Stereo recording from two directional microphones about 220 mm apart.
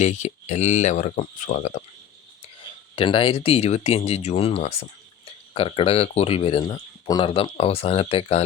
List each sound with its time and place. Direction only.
0.0 s speech: 30° left (ahead or behind)
2.9 s speech: 25° left (ahead or behind)